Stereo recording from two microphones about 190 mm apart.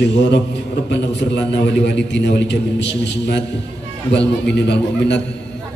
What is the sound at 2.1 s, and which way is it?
A man's voice, 65° left (ahead or behind).